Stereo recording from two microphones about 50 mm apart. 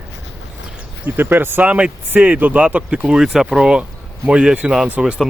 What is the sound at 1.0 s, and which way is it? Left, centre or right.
Speech, right.